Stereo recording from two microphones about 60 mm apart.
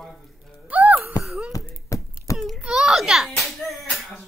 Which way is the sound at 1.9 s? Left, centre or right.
Left.